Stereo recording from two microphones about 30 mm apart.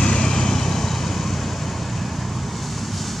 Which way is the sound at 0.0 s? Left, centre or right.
Left.